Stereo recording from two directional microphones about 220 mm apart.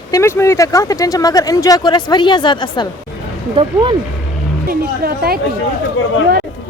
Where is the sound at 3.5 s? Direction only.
20° right (ahead or behind).